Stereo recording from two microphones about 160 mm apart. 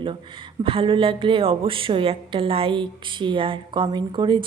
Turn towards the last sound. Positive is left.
turn(degrees=-30)  # may be behind; listen again after turning